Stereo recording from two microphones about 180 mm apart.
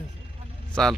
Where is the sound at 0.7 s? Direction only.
5° left (ahead or behind).